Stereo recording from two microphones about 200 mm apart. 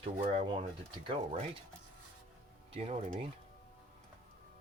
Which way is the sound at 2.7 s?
30° right (ahead or behind).